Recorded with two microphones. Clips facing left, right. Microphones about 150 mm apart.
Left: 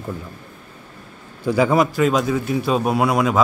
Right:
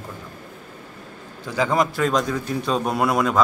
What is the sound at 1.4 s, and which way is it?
A man's voice, 10° left (ahead or behind).